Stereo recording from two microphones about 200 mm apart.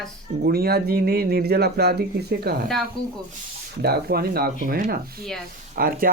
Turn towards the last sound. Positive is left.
turn(degrees=-45)  # may be behind; listen again after turning